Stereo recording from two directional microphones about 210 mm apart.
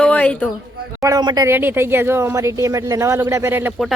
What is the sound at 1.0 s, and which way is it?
Speech, 20° right (ahead or behind).